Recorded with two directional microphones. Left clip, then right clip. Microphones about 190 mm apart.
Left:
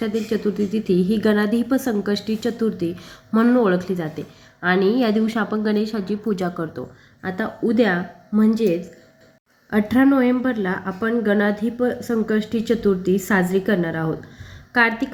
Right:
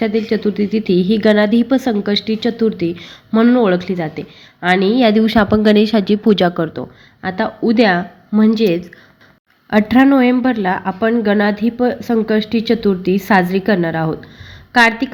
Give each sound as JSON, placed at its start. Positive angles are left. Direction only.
{"t": 0.0, "sound": "a woman's voice", "side_deg": -20}